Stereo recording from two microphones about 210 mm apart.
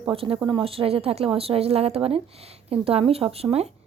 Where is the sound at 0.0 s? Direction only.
25° right (ahead or behind).